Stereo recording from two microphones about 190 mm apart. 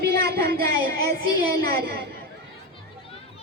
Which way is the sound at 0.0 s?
55° right (ahead or behind).